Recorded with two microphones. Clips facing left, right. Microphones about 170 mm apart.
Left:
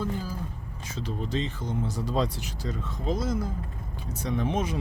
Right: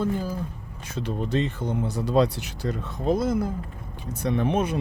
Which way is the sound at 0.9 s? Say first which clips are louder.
Right 5 dB; 60° right (ahead or behind).